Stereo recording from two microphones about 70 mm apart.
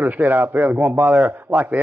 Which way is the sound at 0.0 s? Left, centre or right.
Right.